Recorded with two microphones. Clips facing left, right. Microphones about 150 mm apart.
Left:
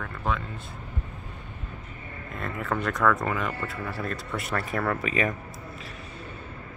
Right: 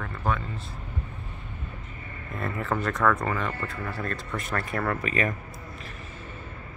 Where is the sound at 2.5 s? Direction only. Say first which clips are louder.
Even; centre (ahead or behind).